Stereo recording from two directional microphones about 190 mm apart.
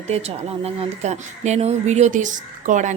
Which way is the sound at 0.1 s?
35° right (ahead or behind).